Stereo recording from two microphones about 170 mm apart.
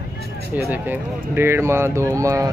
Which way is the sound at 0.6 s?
10° right (ahead or behind).